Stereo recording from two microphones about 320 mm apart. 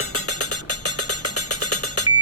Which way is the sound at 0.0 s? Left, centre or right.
Left.